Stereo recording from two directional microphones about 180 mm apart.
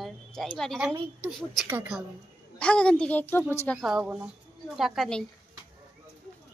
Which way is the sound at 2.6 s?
5° left (ahead or behind).